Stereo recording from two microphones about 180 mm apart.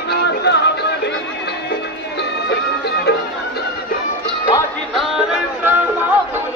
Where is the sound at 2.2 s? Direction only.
70° left (ahead or behind).